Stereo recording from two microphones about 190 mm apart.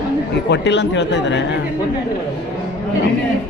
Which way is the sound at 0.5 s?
70° left (ahead or behind).